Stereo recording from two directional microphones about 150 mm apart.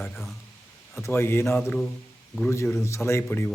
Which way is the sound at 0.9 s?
15° left (ahead or behind).